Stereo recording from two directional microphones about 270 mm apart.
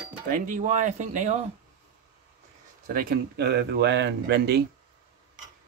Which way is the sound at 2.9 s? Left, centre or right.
Right.